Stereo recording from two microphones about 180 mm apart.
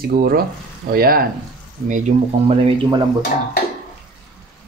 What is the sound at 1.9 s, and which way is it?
Speech, 45° right (ahead or behind).